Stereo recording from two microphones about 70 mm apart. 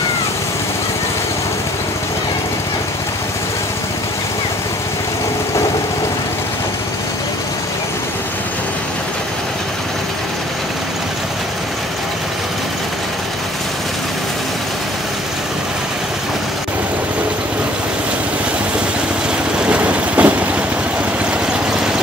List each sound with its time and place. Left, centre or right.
19.6 s vehicle: centre
21.7 s vehicle: centre